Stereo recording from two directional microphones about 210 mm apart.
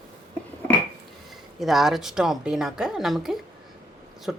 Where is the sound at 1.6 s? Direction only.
Centre (ahead or behind).